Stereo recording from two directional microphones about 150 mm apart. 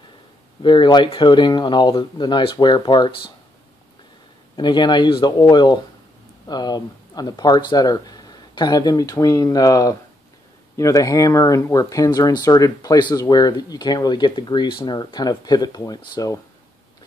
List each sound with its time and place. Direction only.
0.6 s speech: 30° left (ahead or behind)
4.6 s speech: 30° left (ahead or behind)